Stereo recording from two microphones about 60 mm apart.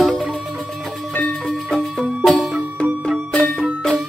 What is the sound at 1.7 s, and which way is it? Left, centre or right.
Music, centre.